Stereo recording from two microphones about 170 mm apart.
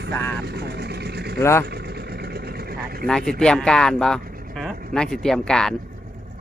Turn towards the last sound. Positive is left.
turn(degrees=5)  # may be behind; listen again after turning